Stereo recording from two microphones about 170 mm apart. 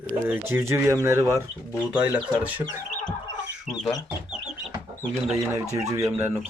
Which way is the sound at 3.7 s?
Centre (ahead or behind).